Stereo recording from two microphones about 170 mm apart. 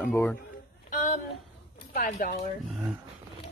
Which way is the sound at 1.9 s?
55° left (ahead or behind).